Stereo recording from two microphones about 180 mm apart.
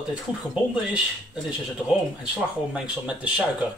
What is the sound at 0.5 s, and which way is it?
Speech, 5° right (ahead or behind).